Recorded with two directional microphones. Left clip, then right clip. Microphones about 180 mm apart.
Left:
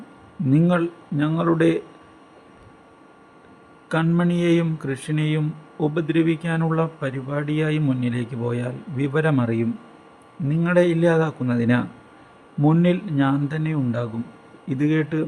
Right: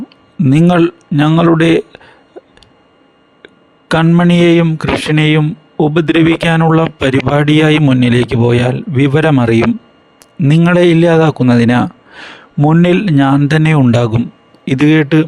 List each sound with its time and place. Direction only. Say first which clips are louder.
0.7 s speech: right 12 dB; 60° right (ahead or behind)
3.8 s a man's voice: right 12 dB; 45° right (ahead or behind)
12.5 s speech: right 9 dB; 45° right (ahead or behind)
12.8 s speech: right 11 dB; 65° right (ahead or behind)
14.7 s a man's voice: right 13 dB; 50° right (ahead or behind)